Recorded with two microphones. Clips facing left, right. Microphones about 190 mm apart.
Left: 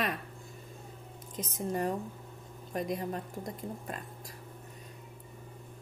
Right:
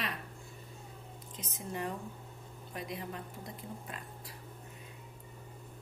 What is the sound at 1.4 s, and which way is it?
A woman's voice, 40° left (ahead or behind).